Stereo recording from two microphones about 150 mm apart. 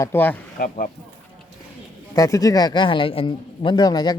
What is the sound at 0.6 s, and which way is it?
Speech, 65° left (ahead or behind).